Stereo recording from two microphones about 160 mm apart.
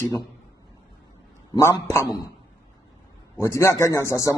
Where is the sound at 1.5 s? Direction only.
20° left (ahead or behind).